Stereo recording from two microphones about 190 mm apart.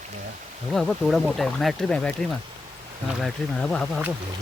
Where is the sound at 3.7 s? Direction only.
Centre (ahead or behind).